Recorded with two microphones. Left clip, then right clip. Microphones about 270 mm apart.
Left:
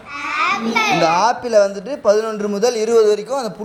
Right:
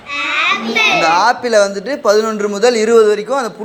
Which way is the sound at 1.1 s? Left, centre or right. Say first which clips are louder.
Right 3 dB; left.